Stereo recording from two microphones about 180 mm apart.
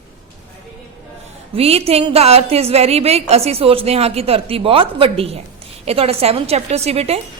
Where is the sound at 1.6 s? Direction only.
35° right (ahead or behind).